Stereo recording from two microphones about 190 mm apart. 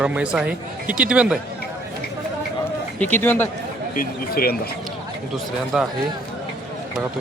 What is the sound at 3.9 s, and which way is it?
Speech, 50° left (ahead or behind).